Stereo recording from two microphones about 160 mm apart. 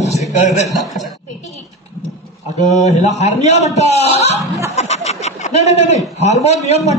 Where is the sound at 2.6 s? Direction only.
45° left (ahead or behind).